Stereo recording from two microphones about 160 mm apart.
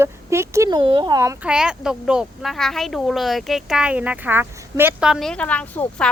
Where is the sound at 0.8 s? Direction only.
30° right (ahead or behind).